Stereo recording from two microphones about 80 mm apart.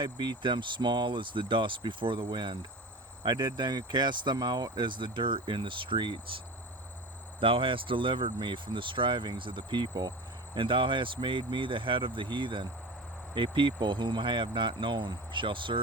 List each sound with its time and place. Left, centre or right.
0.0 s speech: right
10.5 s speech: right